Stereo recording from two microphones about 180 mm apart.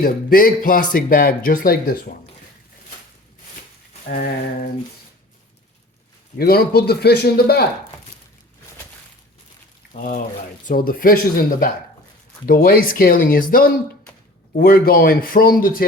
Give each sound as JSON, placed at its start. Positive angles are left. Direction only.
{"t": 0.0, "sound": "speech", "side_deg": 55}
{"t": 4.1, "sound": "speech", "side_deg": 55}
{"t": 6.4, "sound": "speech", "side_deg": 60}
{"t": 9.9, "sound": "speech", "side_deg": 50}
{"t": 12.5, "sound": "speech", "side_deg": 55}